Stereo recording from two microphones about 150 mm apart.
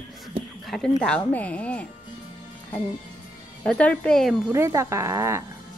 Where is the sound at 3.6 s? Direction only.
10° left (ahead or behind).